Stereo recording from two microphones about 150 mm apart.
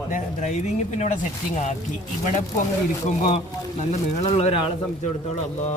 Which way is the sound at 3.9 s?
45° left (ahead or behind).